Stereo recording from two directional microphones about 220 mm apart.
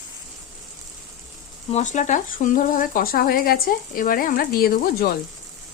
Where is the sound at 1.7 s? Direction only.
30° left (ahead or behind).